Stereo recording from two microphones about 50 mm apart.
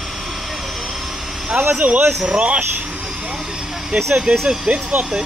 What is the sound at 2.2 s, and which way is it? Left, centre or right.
Speech, right.